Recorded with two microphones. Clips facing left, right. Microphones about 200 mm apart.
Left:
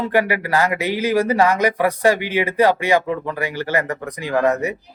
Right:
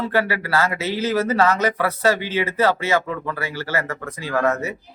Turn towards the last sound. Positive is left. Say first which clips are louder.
# left 3 dB
turn(degrees=15)  # may be behind; listen again after turning